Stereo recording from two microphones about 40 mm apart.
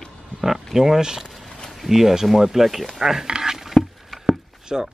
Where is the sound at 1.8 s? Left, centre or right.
Centre.